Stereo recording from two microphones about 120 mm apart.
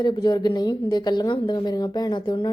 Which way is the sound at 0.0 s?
35° left (ahead or behind).